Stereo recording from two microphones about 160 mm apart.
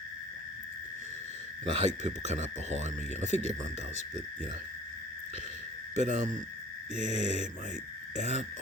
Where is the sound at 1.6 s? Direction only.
45° right (ahead or behind).